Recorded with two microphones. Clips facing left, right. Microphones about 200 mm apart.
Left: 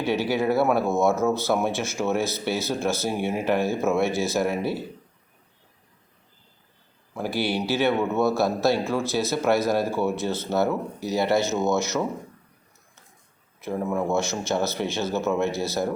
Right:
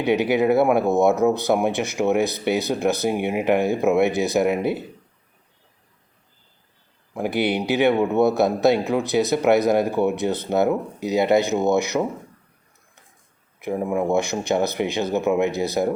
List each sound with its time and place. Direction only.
0.0 s speech: 20° right (ahead or behind)
7.1 s speech: 20° right (ahead or behind)
13.6 s speech: 15° right (ahead or behind)